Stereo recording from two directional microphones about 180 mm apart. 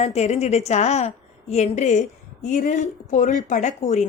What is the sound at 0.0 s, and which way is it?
A woman's voice, 35° left (ahead or behind).